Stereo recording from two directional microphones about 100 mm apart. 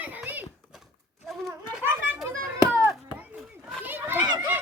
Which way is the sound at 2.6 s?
20° right (ahead or behind).